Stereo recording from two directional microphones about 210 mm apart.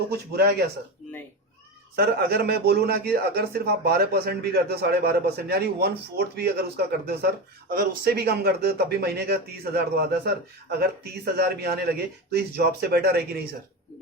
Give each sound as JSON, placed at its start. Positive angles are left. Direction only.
{"t": 2.0, "sound": "a man's voice", "side_deg": -50}